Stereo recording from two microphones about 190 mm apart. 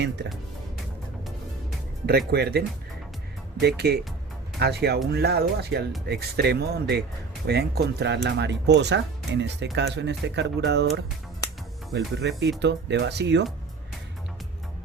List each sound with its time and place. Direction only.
2.0 s speech: 55° right (ahead or behind)
3.8 s speech: 60° right (ahead or behind)